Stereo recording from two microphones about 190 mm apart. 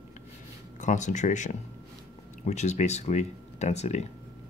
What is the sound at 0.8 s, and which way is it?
Speech, 40° left (ahead or behind).